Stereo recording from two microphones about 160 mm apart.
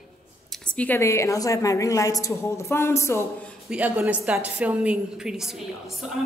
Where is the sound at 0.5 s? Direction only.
5° left (ahead or behind).